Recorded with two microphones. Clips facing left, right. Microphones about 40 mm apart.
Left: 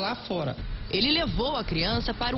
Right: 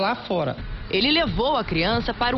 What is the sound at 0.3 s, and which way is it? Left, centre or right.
Speech, centre.